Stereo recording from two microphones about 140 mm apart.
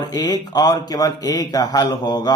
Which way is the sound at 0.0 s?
25° left (ahead or behind).